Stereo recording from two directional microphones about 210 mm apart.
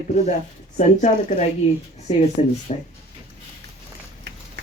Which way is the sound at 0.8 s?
35° left (ahead or behind).